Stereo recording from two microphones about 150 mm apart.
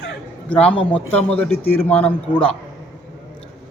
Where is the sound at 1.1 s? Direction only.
10° left (ahead or behind).